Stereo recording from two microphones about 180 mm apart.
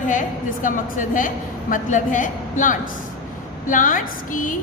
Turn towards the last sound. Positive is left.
turn(degrees=50)  # may be behind; listen again after turning